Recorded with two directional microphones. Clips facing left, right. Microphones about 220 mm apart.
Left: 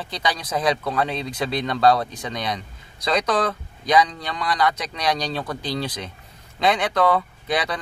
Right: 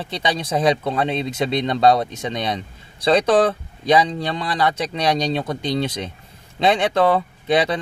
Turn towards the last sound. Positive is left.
turn(degrees=-25)  # may be behind; listen again after turning